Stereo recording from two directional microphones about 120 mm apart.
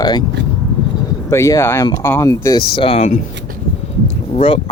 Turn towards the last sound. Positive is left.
turn(degrees=60)  # may be behind; listen again after turning